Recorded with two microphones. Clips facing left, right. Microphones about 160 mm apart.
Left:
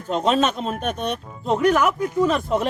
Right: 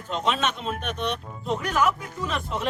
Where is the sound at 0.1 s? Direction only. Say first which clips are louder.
Left 6 dB; 40° left (ahead or behind).